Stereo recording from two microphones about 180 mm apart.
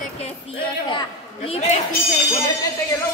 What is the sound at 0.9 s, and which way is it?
Speech, 30° left (ahead or behind).